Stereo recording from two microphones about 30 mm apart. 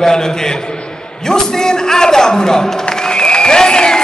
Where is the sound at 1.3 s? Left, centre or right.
Left.